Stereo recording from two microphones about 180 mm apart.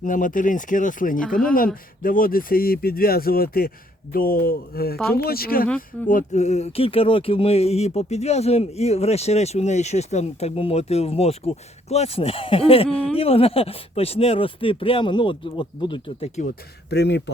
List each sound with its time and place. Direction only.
0.0 s speech: 50° left (ahead or behind)
5.6 s speech: 5° left (ahead or behind)
6.1 s a sound: 45° left (ahead or behind)
16.9 s speech: 70° left (ahead or behind)